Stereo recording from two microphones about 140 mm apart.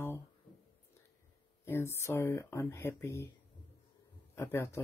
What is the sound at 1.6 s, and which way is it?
Speech, 15° left (ahead or behind).